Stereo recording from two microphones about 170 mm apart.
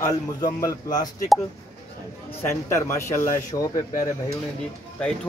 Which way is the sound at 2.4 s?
15° left (ahead or behind).